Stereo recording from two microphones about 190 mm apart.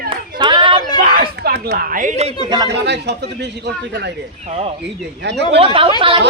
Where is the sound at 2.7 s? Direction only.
65° right (ahead or behind).